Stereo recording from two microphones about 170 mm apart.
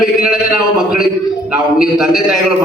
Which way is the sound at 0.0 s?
5° right (ahead or behind).